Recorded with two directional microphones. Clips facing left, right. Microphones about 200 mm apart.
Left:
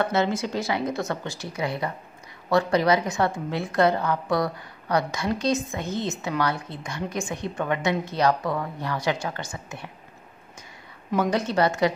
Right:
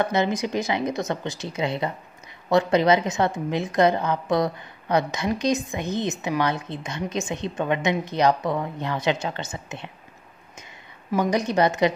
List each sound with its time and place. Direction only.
0.0 s a woman's voice: 15° right (ahead or behind)
11.1 s a woman's voice: 15° right (ahead or behind)